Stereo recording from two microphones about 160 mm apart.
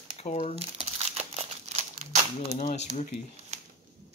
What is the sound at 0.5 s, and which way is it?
Crumpling, 40° right (ahead or behind).